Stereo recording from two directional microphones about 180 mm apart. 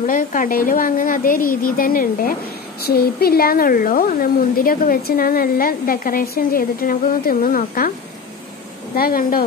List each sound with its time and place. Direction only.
0.0 s speech: 45° left (ahead or behind)
8.9 s a woman's voice: 55° left (ahead or behind)